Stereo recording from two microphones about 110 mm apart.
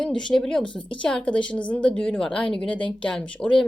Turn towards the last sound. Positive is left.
turn(degrees=10)  # may be behind; listen again after turning